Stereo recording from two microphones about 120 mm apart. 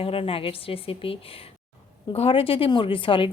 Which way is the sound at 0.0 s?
50° left (ahead or behind).